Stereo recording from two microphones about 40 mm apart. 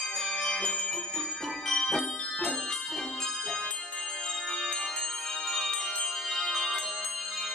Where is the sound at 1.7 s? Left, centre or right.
Centre.